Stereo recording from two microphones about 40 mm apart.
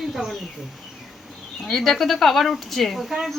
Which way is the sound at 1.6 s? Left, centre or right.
Centre.